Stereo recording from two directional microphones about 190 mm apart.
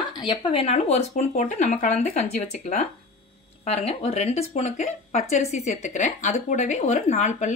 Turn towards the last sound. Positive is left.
turn(degrees=40)  # may be behind; listen again after turning